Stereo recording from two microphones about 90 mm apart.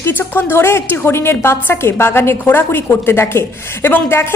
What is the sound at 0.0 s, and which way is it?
A woman's voice, 25° left (ahead or behind).